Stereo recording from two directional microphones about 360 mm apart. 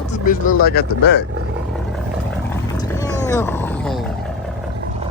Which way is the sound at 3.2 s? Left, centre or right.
Centre.